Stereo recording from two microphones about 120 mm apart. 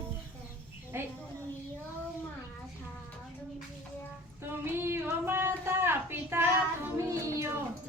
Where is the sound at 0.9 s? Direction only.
20° right (ahead or behind).